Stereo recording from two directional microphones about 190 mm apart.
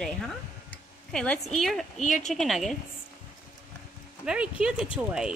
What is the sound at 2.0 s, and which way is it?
Speech, 40° left (ahead or behind).